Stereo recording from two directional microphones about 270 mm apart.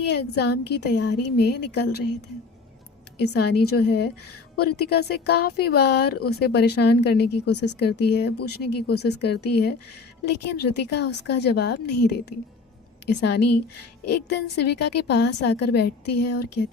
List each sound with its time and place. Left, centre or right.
0.1 s speech: left
3.2 s speech: left